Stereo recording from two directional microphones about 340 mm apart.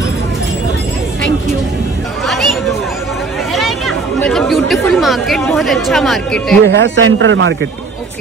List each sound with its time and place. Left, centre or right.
2.2 s a sound: centre
3.5 s chatter: centre
6.6 s a man's voice: right